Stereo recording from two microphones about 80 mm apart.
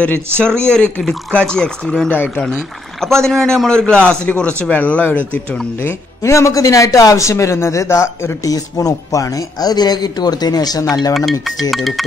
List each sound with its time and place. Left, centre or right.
0.0 s speech: centre
2.0 s speech: left
2.4 s speech: centre
5.8 s a man's voice: left
8.5 s speech: left